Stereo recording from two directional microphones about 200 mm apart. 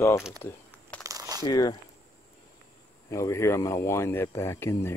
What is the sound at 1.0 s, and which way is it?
Crumpling, 15° right (ahead or behind).